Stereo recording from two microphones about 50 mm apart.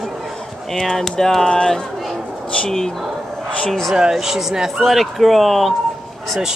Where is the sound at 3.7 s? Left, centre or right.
Centre.